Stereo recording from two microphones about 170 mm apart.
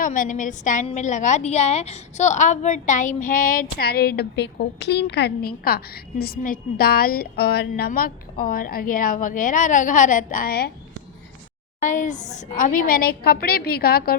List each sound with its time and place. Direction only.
0.0 s a woman's voice: 50° left (ahead or behind)
11.8 s a woman's voice: 50° left (ahead or behind)